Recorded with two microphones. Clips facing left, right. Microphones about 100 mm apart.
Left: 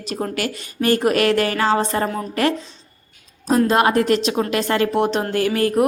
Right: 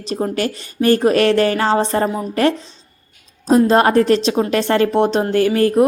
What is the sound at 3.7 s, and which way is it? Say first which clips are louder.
A woman's voice: right 4 dB; 35° right (ahead or behind).